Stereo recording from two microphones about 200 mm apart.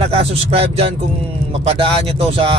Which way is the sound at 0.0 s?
30° right (ahead or behind).